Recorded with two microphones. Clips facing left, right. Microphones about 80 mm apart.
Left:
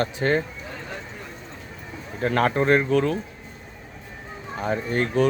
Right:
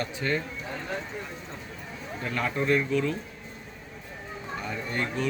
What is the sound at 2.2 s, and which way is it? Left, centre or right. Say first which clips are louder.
Speech: left 8 dB; left.